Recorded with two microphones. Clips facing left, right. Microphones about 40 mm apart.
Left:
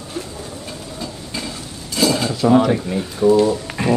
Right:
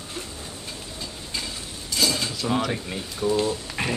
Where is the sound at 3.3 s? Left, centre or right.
Left.